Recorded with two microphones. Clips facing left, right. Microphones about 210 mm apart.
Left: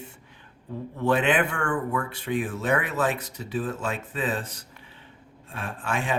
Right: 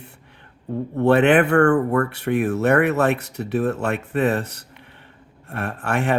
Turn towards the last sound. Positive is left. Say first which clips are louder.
# right 6 dB
turn(degrees=-65)  # may be behind; listen again after turning